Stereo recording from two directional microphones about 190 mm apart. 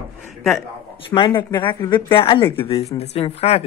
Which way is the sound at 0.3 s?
Centre (ahead or behind).